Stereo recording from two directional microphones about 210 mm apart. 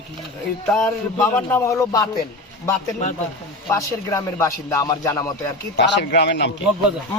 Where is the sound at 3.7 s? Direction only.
15° left (ahead or behind).